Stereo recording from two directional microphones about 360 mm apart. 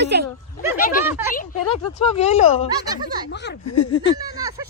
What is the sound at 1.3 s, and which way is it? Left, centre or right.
Speech, centre.